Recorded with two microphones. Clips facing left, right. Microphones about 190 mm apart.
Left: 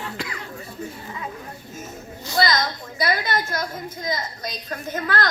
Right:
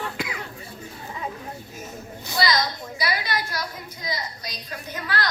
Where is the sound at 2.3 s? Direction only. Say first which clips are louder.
Left 2 dB; 50° left (ahead or behind).